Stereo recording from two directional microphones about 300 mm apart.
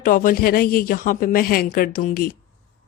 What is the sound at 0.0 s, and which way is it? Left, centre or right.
Speech, left.